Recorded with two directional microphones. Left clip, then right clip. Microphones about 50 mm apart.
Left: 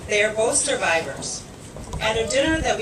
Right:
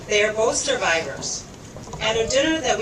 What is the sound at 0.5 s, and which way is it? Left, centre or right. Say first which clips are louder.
Speech: even; right.